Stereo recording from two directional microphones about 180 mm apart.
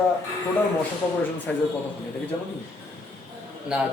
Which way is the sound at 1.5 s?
5° left (ahead or behind).